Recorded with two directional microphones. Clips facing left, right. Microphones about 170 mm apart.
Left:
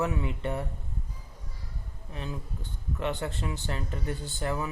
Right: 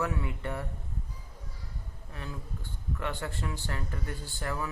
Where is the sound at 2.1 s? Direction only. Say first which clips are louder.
Left 4 dB; 20° left (ahead or behind).